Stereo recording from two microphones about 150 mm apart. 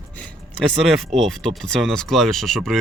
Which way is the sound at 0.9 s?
Centre (ahead or behind).